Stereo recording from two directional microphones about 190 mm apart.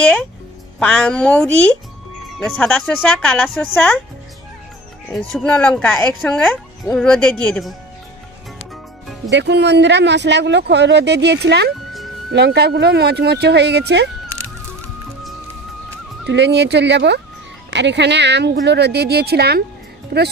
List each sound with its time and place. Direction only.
0.0 s speech: 5° left (ahead or behind)
5.3 s speech: 5° left (ahead or behind)
9.3 s speech: 65° right (ahead or behind)
16.3 s speech: 65° right (ahead or behind)